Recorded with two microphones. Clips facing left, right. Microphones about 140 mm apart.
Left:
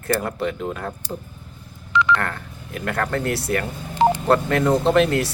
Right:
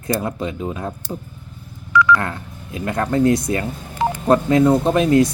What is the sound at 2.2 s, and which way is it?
Speech, 20° right (ahead or behind).